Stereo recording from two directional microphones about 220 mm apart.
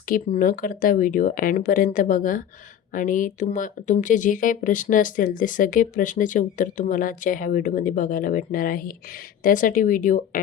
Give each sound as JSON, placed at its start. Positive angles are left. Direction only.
{"t": 0.1, "sound": "speech", "side_deg": 40}